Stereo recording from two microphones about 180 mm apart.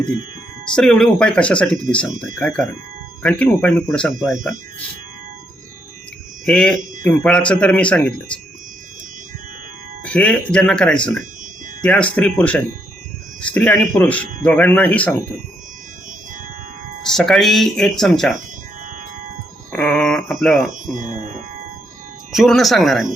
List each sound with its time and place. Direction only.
0.8 s speech: 5° left (ahead or behind)
4.3 s speech: 45° right (ahead or behind)
6.4 s a man's voice: 5° left (ahead or behind)
10.0 s speech: 5° left (ahead or behind)
17.1 s speech: centre (ahead or behind)
19.7 s a sound: 10° left (ahead or behind)
20.6 s speech: 45° right (ahead or behind)
22.3 s speech: centre (ahead or behind)